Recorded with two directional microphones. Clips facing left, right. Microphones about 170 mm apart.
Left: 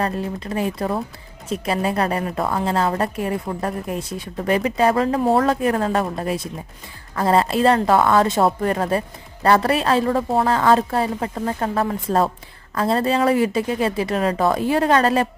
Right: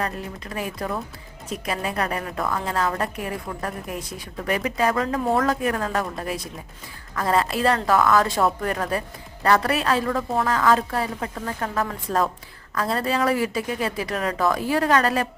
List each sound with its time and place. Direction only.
0.0 s a woman's voice: 30° left (ahead or behind)